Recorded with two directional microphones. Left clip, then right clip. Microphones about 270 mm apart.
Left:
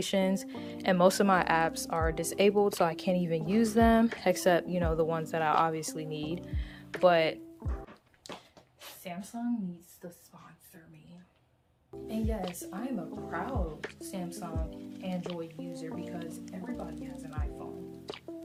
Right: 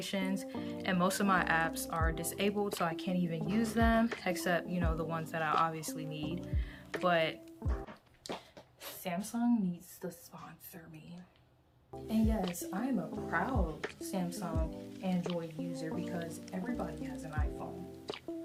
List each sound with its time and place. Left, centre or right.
0.0 s speech: left
6.3 s music: left
7.0 s speech: left
8.2 s a sound: centre
9.3 s speech: centre
12.0 s speech: centre
18.1 s music: centre